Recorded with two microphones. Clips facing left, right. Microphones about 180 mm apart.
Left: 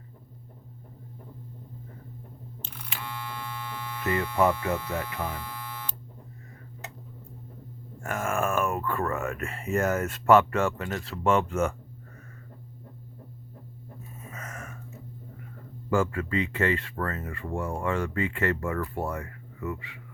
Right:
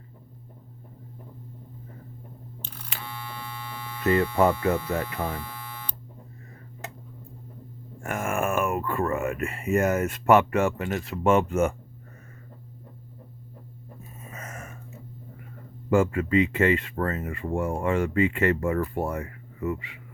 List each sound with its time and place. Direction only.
4.0 s speech: 25° right (ahead or behind)
8.0 s speech: 15° right (ahead or behind)
14.3 s a sound: 25° right (ahead or behind)
15.9 s speech: 20° right (ahead or behind)